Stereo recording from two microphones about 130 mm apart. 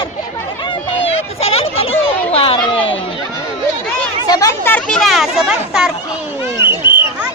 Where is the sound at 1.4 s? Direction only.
50° left (ahead or behind).